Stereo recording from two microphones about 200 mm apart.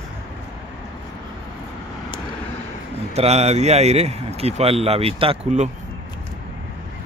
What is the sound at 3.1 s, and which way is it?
Speech, 30° right (ahead or behind).